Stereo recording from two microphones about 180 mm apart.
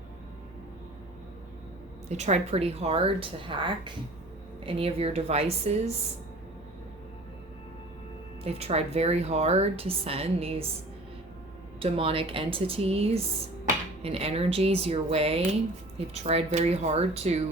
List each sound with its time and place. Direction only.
2.0 s speech: 40° right (ahead or behind)
8.4 s speech: 35° right (ahead or behind)
11.8 s speech: 30° right (ahead or behind)